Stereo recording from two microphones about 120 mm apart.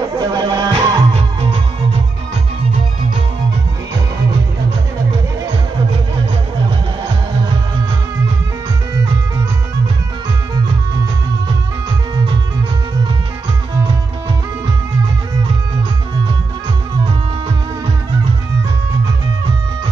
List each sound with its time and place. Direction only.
0.1 s music: 35° right (ahead or behind)